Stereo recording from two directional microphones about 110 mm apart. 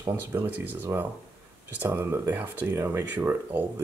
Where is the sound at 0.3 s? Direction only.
15° right (ahead or behind).